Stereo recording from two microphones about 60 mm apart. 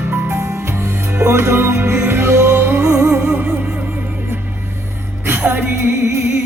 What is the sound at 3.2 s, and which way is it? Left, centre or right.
Music, right.